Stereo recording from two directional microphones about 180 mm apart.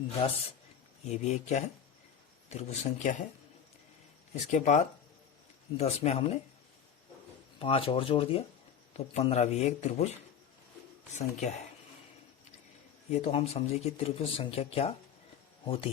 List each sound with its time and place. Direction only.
1.0 s speech: 40° left (ahead or behind)
4.5 s speech: 45° left (ahead or behind)
7.6 s speech: 30° left (ahead or behind)
11.1 s speech: 40° left (ahead or behind)
13.1 s speech: 35° left (ahead or behind)